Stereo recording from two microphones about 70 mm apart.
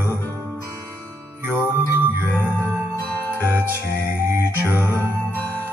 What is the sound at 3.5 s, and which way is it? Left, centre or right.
Music, right.